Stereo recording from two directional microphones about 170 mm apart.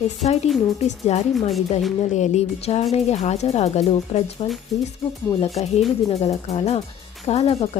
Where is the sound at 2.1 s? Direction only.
40° left (ahead or behind).